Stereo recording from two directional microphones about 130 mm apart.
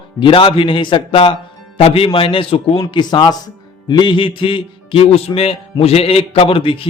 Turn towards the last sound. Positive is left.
turn(degrees=45)  # may be behind; listen again after turning